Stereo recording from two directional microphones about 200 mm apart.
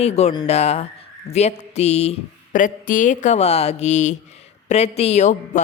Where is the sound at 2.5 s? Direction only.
40° left (ahead or behind).